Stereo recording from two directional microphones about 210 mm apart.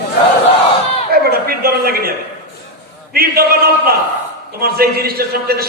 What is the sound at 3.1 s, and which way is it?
Speech, 45° right (ahead or behind).